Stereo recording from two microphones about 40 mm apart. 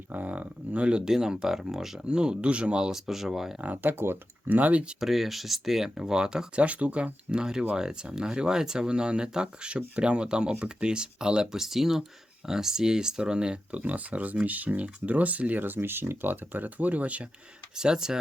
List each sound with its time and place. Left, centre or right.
0.1 s speech: right
1.0 s speech: centre
2.0 s speech: right
2.9 s speech: centre
3.9 s speech: right
4.4 s speech: right
4.9 s speech: centre
6.0 s speech: centre
6.6 s speech: right
11.6 s speech: centre
13.7 s speech: right
17.7 s speech: centre